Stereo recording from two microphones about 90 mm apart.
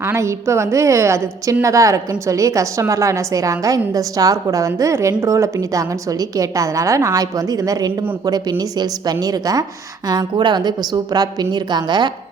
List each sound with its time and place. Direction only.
0.0 s a woman's voice: 30° right (ahead or behind)
10.1 s a woman's voice: 55° right (ahead or behind)